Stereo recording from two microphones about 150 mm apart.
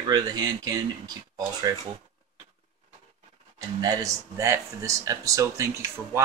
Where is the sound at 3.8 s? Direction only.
25° right (ahead or behind).